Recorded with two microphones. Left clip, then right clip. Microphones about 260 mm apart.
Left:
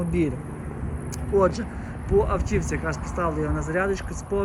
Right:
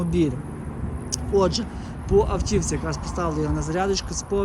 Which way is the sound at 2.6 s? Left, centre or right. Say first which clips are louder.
Even; centre.